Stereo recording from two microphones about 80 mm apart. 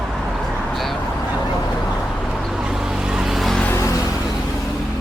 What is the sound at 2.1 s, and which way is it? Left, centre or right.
Vehicle, centre.